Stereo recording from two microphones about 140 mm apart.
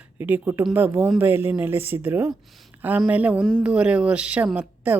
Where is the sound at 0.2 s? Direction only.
15° right (ahead or behind).